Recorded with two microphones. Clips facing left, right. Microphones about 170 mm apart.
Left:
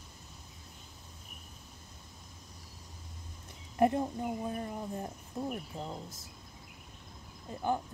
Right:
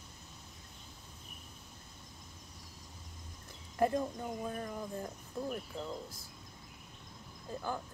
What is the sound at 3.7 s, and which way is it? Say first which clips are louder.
Speech: left 3 dB; 20° left (ahead or behind).